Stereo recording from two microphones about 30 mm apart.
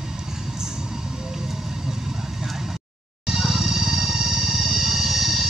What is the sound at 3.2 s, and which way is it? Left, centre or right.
Music, centre.